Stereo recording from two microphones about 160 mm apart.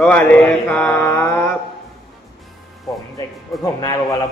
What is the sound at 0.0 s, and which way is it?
Mantra, 10° left (ahead or behind).